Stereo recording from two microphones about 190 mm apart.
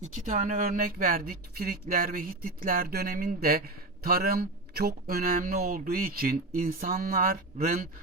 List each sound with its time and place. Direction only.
0.3 s speech: 40° right (ahead or behind)